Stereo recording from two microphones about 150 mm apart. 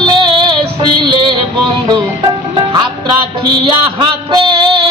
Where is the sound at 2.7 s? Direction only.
35° right (ahead or behind).